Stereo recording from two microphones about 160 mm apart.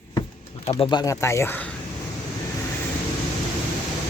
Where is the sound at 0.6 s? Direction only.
30° left (ahead or behind); by 1.7 s 10° left (ahead or behind).